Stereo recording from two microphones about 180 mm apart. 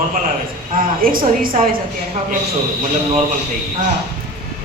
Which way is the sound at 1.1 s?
50° right (ahead or behind).